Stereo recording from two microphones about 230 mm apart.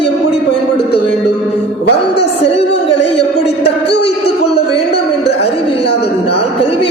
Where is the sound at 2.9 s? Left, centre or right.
Left.